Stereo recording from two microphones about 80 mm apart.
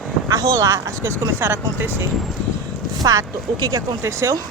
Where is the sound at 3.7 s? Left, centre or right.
Right.